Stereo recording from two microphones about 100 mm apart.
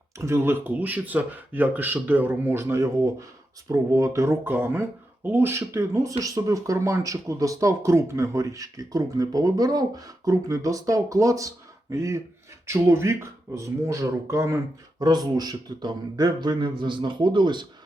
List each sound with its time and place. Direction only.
0.2 s speech: 25° right (ahead or behind)
15.0 s a man's voice: 40° right (ahead or behind)